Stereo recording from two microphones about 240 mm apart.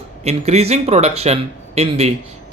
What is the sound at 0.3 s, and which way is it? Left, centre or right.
Speech, right.